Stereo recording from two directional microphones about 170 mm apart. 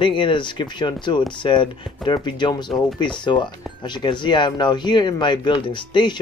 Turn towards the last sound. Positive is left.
turn(degrees=25)  # may be behind; listen again after turning